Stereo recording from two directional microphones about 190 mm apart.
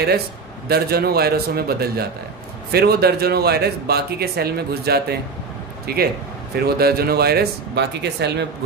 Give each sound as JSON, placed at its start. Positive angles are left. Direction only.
{"t": 0.7, "sound": "speech", "side_deg": -55}